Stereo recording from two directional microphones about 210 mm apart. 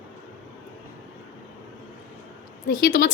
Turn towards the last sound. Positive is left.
turn(degrees=40)  # may be behind; listen again after turning